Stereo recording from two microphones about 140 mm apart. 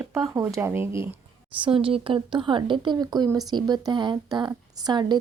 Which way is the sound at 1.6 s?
40° right (ahead or behind).